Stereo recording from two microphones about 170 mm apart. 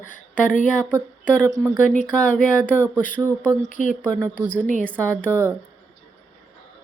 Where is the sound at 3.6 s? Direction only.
50° left (ahead or behind).